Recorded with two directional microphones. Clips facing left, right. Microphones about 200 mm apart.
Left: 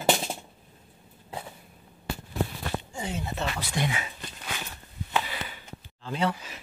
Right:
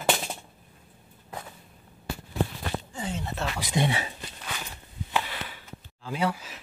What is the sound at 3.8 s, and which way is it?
Speech, 30° right (ahead or behind).